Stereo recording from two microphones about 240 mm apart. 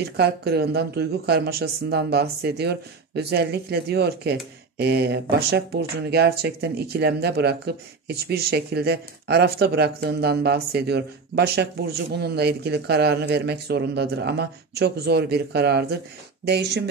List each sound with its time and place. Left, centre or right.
0.0 s speech: right